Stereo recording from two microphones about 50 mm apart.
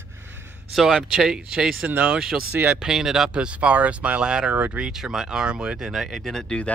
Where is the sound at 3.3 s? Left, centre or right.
Right.